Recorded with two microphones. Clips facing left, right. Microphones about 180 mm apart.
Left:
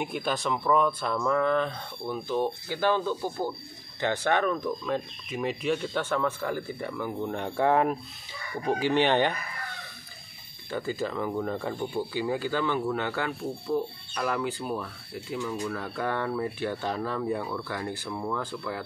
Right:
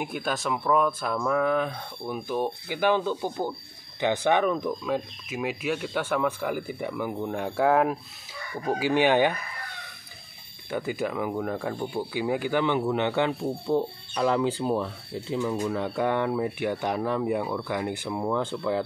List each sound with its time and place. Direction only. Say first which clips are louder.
0.0 s speech: even; centre (ahead or behind)
10.7 s speech: right 2 dB; 15° right (ahead or behind)